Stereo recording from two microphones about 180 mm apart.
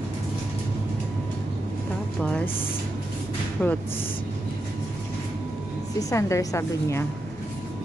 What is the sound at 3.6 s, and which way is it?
Speech, 10° left (ahead or behind).